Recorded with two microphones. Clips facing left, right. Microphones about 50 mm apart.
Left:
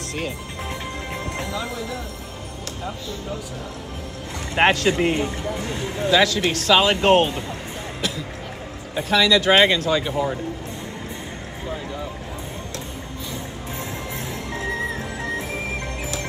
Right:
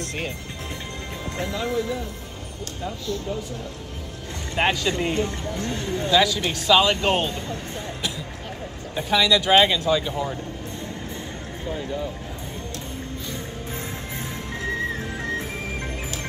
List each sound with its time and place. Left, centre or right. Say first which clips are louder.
0.0 s music: left 1 dB; centre
1.4 s speech: right 4 dB; centre
4.6 s speech: left 5 dB; left
8.9 s speech: left 2 dB; centre